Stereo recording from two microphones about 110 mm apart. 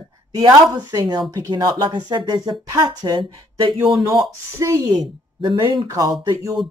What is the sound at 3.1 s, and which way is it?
Speech, 45° right (ahead or behind).